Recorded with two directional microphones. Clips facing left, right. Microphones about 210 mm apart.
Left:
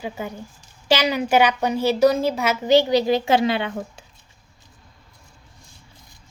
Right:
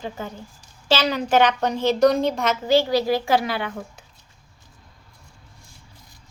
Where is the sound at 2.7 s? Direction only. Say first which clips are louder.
Left 3 dB; 20° left (ahead or behind).